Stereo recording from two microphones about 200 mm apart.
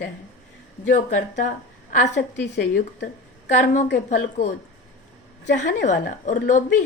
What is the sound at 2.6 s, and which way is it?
Speech, 55° left (ahead or behind).